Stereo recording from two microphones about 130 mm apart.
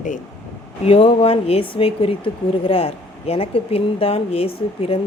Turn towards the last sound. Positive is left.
turn(degrees=45)  # may be behind; listen again after turning